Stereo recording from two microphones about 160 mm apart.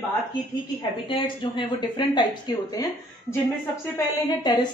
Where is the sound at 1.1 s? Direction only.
30° left (ahead or behind).